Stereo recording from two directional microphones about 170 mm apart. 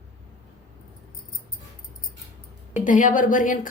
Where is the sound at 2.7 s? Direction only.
50° left (ahead or behind).